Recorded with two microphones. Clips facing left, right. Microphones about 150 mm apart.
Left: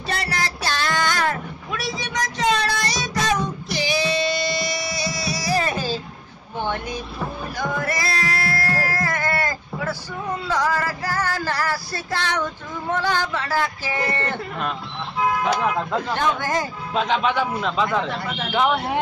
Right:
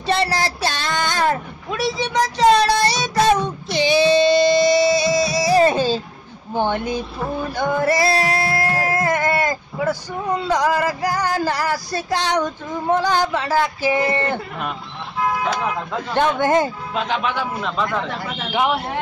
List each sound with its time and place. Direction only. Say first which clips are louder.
0.1 s a sound: right 7 dB; 30° right (ahead or behind)
10.5 s music: right 3 dB; 15° right (ahead or behind)
13.3 s speech: right 4 dB; 20° right (ahead or behind)
16.2 s speech: right 10 dB; 25° right (ahead or behind)
16.9 s a man's voice: left 5 dB; centre (ahead or behind)
18.5 s music: even; 10° right (ahead or behind)